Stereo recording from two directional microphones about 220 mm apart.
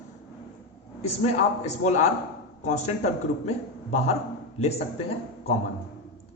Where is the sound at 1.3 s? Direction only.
30° left (ahead or behind).